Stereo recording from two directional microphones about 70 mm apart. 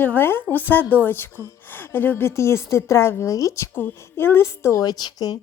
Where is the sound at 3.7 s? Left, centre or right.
Left.